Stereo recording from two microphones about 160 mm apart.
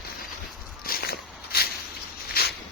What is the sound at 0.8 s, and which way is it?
Walk, 70° left (ahead or behind).